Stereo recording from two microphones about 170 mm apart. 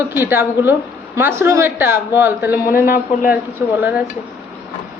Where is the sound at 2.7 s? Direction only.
55° left (ahead or behind).